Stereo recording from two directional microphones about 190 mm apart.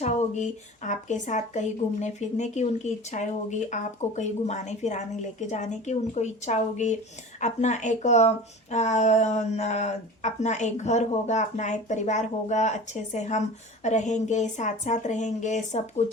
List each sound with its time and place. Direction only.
0.0 s speech: 40° left (ahead or behind)